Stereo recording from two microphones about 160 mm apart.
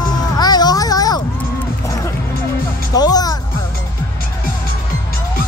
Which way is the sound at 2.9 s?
25° left (ahead or behind).